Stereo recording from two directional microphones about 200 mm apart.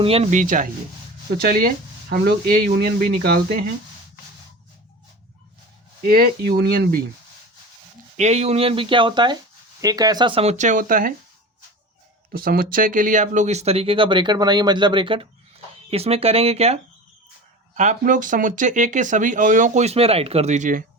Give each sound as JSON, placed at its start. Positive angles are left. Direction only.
{"t": 0.0, "sound": "speech", "side_deg": -30}
{"t": 6.0, "sound": "speech", "side_deg": -50}
{"t": 8.1, "sound": "speech", "side_deg": -35}
{"t": 12.3, "sound": "speech", "side_deg": -45}